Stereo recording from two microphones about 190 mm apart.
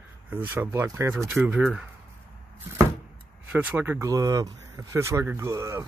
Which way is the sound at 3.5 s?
10° right (ahead or behind).